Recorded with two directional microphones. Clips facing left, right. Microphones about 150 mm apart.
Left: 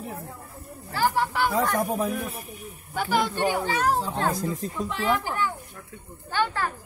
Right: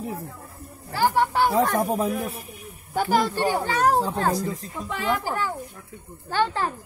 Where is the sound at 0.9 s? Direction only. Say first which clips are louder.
Right 3 dB; 25° right (ahead or behind).